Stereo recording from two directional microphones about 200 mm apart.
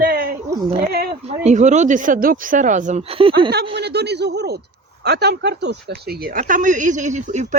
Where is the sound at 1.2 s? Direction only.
35° right (ahead or behind).